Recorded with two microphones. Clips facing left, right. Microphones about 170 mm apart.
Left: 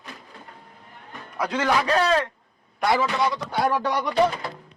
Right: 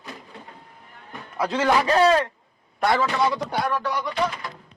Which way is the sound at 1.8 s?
20° right (ahead or behind).